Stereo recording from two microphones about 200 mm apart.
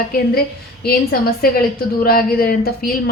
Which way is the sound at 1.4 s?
50° left (ahead or behind).